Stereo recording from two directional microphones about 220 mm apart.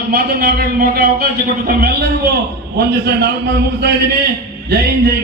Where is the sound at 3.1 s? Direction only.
50° right (ahead or behind).